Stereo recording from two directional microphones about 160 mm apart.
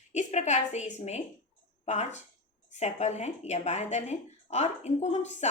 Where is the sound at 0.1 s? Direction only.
45° left (ahead or behind).